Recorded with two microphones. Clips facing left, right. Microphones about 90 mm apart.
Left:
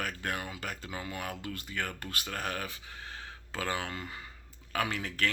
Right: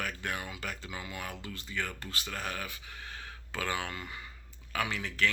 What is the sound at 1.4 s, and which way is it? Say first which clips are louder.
Speech: left 1 dB; 50° left (ahead or behind).